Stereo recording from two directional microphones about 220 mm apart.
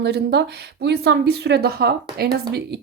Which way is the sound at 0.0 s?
50° right (ahead or behind).